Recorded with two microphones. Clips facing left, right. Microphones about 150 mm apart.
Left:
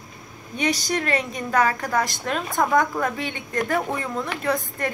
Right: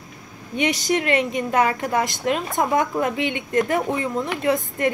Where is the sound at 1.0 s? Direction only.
40° left (ahead or behind).